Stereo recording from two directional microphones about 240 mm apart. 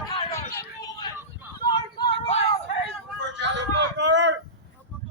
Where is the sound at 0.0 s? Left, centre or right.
Centre.